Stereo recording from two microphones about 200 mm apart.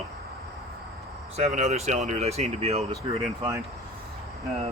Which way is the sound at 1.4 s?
35° right (ahead or behind).